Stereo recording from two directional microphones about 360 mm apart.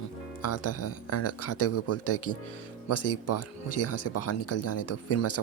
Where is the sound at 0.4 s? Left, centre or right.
Left.